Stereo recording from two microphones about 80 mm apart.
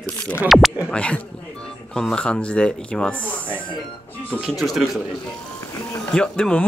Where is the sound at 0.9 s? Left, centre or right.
Centre.